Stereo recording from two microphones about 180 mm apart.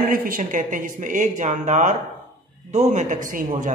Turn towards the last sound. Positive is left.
turn(degrees=-50)  # may be behind; listen again after turning